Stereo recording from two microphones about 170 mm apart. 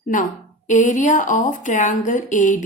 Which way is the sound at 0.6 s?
45° left (ahead or behind).